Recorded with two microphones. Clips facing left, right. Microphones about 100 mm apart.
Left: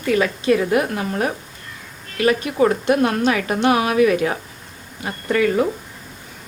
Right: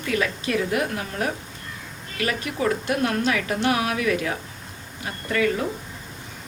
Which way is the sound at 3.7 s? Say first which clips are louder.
Left 8 dB; 30° left (ahead or behind).